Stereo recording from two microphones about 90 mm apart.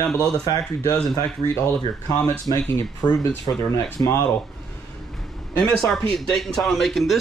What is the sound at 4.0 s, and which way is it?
Speech, 35° left (ahead or behind).